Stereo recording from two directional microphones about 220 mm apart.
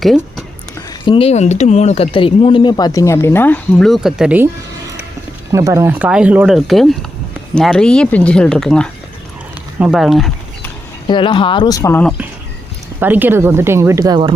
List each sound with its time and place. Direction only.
1.0 s speech: 25° left (ahead or behind); by 4.4 s 5° right (ahead or behind)
5.5 s speech: 15° right (ahead or behind); by 10.7 s centre (ahead or behind)
11.0 s speech: 20° left (ahead or behind)
13.0 s speech: 10° right (ahead or behind)